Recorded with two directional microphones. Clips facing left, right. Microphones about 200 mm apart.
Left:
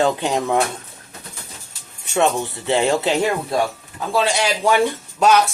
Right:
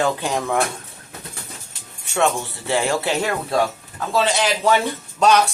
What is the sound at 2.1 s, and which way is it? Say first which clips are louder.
Speech: left 2 dB; 20° left (ahead or behind).